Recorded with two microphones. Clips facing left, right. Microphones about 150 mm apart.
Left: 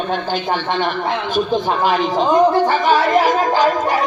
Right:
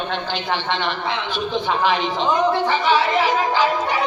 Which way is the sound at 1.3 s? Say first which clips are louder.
Left 5 dB; 45° left (ahead or behind).